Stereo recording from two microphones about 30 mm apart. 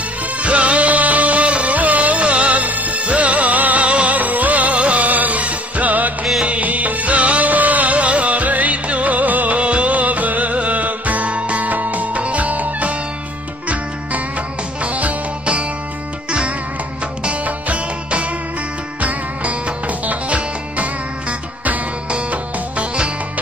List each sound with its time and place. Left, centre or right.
0.4 s music: right
0.8 s music: right
1.8 s music: right
3.8 s music: right
4.2 s music: right
4.7 s music: right
5.0 s music: right
9.6 s music: right
11.7 s music: right
14.8 s music: right
16.3 s music: right
17.5 s music: right
18.9 s music: right